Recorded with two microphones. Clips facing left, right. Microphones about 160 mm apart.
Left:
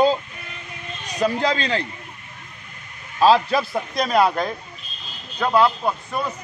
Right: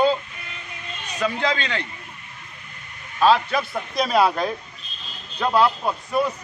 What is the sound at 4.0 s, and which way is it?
A man's voice, centre (ahead or behind).